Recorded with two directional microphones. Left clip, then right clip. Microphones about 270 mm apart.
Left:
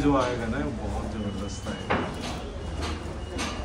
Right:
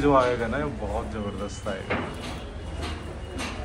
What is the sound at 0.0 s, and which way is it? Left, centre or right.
Speech, centre.